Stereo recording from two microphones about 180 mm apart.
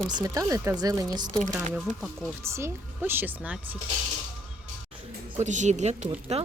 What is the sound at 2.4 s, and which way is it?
Speech, 15° right (ahead or behind).